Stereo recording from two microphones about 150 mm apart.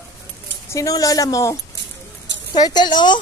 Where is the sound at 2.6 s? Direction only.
30° left (ahead or behind).